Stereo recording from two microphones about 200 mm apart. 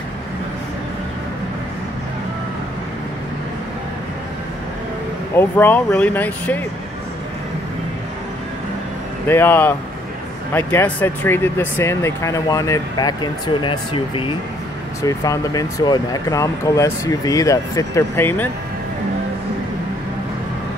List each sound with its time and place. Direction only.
5.3 s speech: 10° left (ahead or behind)
9.3 s speech: 10° left (ahead or behind)